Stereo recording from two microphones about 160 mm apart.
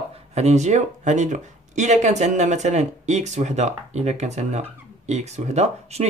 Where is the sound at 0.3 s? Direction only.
45° right (ahead or behind).